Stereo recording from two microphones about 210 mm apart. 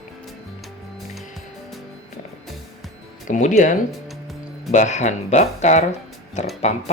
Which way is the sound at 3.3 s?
35° left (ahead or behind).